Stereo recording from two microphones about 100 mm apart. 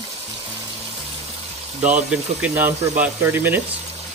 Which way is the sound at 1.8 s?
15° right (ahead or behind).